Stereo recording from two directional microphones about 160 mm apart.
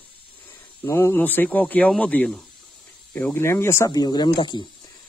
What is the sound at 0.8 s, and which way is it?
Speech, 15° left (ahead or behind).